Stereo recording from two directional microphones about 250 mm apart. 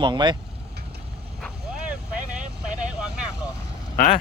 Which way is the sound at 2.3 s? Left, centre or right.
Centre.